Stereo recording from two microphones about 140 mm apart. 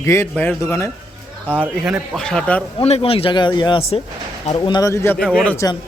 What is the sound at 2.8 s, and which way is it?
Speech, 45° left (ahead or behind).